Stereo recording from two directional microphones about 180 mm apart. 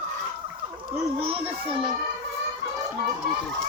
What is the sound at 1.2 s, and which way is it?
Children playing, 35° right (ahead or behind).